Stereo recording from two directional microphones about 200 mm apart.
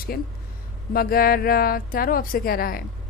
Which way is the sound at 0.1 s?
50° left (ahead or behind).